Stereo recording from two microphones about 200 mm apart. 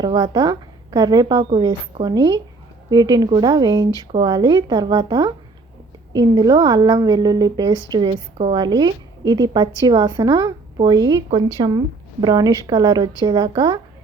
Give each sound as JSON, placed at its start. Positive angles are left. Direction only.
{"t": 0.0, "sound": "a woman's voice", "side_deg": -20}